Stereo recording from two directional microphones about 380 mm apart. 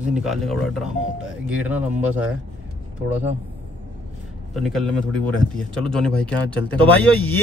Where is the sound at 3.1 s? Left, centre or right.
Centre.